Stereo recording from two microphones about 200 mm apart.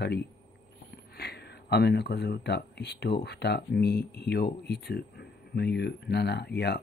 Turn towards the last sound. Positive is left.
turn(degrees=55)  # may be behind; listen again after turning